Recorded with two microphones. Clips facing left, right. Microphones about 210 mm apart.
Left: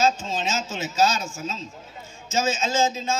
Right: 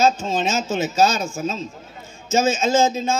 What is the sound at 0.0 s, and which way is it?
A man's voice, 55° right (ahead or behind).